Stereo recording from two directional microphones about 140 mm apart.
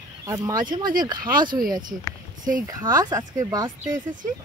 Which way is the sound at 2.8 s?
25° right (ahead or behind).